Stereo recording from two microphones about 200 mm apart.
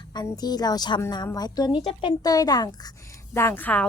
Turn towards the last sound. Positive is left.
turn(degrees=10)  # may be behind; listen again after turning